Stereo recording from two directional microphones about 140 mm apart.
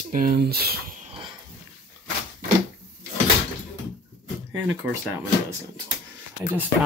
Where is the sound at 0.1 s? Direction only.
85° right.